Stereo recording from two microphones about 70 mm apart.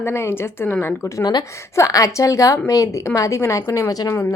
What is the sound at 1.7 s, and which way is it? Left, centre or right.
Speech, left.